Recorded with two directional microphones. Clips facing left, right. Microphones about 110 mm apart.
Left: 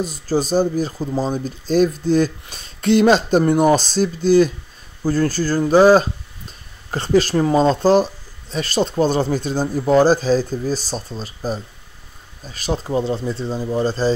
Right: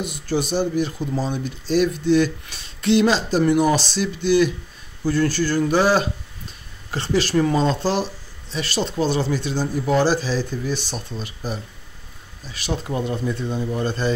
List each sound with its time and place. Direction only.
0.0 s speech: 35° left (ahead or behind)